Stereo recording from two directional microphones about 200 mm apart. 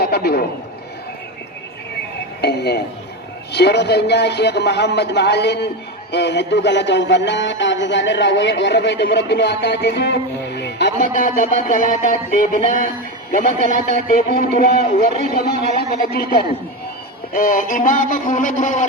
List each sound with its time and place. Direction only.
0.0 s a sound: 50° left (ahead or behind)
2.4 s speech: 55° left (ahead or behind)
10.9 s music: 40° left (ahead or behind)
13.3 s a man's voice: 40° left (ahead or behind)
17.3 s music: 45° left (ahead or behind)